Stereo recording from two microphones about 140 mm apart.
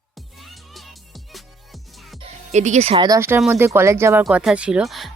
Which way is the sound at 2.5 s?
55° right (ahead or behind).